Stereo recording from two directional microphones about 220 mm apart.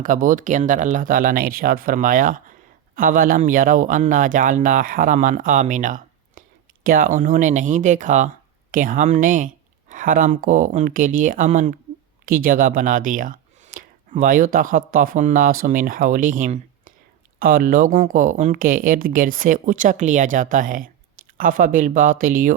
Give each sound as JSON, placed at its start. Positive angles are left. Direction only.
{"t": 0.0, "sound": "speech", "side_deg": -35}